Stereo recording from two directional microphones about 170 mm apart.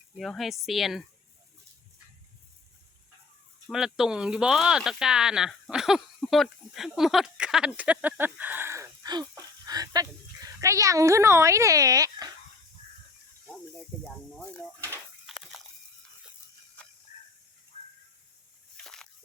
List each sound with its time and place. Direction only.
0.2 s speech: centre (ahead or behind)
3.7 s speech: 5° right (ahead or behind); by 12.3 s 20° right (ahead or behind)
14.3 s speech: 5° left (ahead or behind)
15.3 s biting: centre (ahead or behind)
18.8 s a sound: 5° left (ahead or behind)